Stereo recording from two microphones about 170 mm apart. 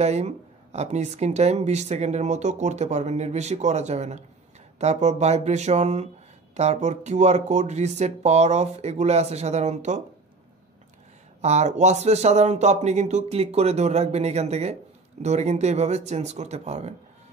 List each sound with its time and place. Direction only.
0.0 s a woman's voice: 40° right (ahead or behind)
11.4 s a woman's voice: 40° right (ahead or behind)